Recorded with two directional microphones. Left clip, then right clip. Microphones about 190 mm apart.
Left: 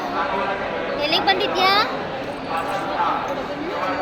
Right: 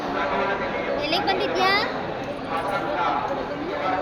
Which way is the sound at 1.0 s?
15° left (ahead or behind).